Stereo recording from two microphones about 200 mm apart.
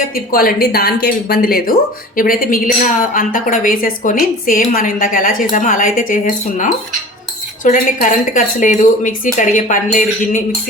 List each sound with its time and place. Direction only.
0.1 s a woman's voice: 45° left (ahead or behind)
7.6 s speech: 40° left (ahead or behind)